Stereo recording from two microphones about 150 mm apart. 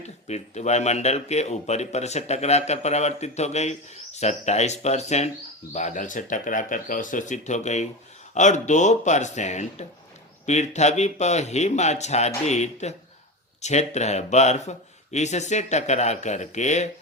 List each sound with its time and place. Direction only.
0.0 s speech: 45° left (ahead or behind)